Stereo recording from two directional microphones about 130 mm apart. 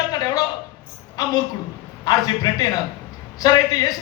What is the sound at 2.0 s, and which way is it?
Speech, 30° left (ahead or behind).